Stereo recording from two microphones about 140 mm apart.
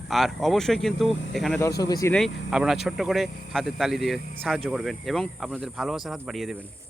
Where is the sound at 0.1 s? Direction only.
Centre (ahead or behind).